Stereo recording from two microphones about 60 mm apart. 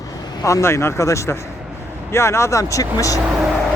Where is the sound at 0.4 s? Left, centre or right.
Left.